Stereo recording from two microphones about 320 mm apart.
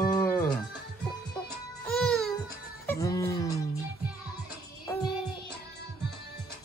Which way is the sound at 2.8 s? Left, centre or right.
Centre.